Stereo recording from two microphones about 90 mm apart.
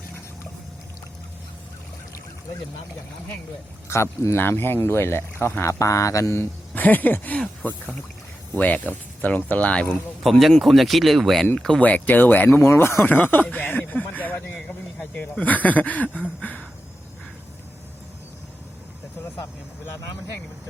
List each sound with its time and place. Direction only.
3.8 s speech: 30° left (ahead or behind); by 10.0 s 15° left (ahead or behind)
10.2 s speech: centre (ahead or behind); by 16.2 s 15° left (ahead or behind)
16.4 s a sound: 15° left (ahead or behind)